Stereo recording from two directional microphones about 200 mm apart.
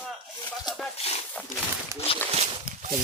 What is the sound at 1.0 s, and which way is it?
Speech, 30° left (ahead or behind).